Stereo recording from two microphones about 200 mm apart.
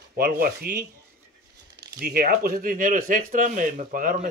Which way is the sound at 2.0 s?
50° right (ahead or behind).